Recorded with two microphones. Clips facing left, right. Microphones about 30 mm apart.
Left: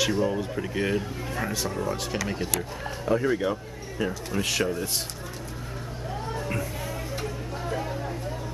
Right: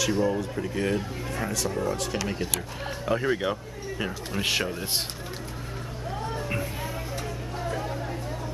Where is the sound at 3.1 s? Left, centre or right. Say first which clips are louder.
Left 1 dB; right.